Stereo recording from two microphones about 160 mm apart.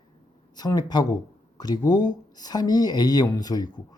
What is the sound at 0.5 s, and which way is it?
Speech, 25° left (ahead or behind).